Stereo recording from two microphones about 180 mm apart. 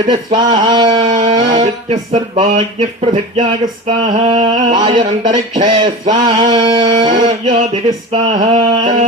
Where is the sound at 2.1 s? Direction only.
40° right (ahead or behind).